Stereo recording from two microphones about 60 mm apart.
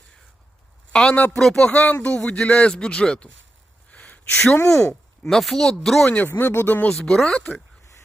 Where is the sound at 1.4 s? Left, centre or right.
Centre.